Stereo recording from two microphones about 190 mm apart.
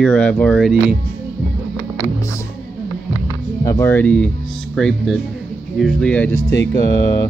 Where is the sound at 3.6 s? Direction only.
15° left (ahead or behind).